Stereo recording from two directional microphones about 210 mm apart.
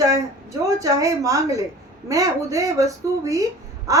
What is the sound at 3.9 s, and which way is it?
Crow, 15° right (ahead or behind).